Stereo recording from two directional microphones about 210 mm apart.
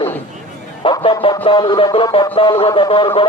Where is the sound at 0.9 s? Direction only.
25° left (ahead or behind).